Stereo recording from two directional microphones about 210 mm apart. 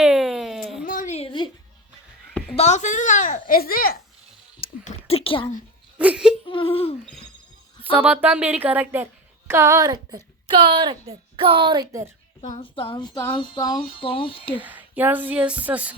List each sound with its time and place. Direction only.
0.0 s a sound: centre (ahead or behind)
0.9 s a sound: 35° left (ahead or behind)
2.6 s a woman's voice: 35° left (ahead or behind)
4.6 s a sound: 35° left (ahead or behind)
6.0 s speech: 5° right (ahead or behind)
6.5 s speech: 25° left (ahead or behind)
8.0 s speech: 5° right (ahead or behind)
12.4 s speech: 25° left (ahead or behind)
14.6 s speech: 10° right (ahead or behind)